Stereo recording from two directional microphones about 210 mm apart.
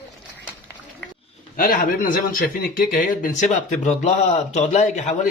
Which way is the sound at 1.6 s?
45° left (ahead or behind).